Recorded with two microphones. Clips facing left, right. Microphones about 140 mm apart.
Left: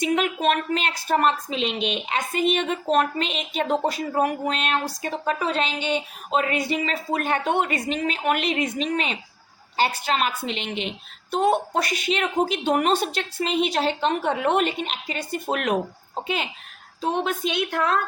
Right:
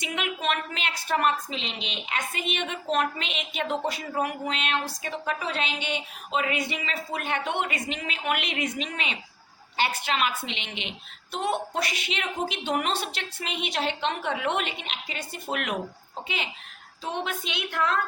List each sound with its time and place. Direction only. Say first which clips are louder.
0.0 s a woman's voice: left 8 dB; 40° left (ahead or behind)